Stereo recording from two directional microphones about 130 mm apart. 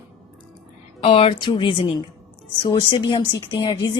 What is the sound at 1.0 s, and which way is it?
A woman's voice, 40° left (ahead or behind).